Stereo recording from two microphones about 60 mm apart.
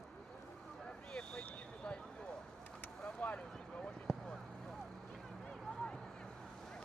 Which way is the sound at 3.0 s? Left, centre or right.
Centre.